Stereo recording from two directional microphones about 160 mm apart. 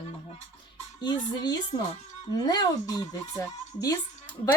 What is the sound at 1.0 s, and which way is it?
Speech, 25° left (ahead or behind).